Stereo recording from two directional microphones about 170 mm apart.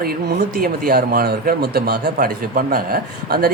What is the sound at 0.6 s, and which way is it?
Speech, 60° right (ahead or behind).